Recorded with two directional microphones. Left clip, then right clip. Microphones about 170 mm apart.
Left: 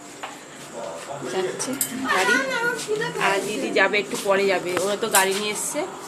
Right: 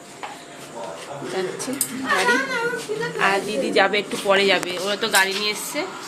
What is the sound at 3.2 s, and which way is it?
Speech, 15° right (ahead or behind).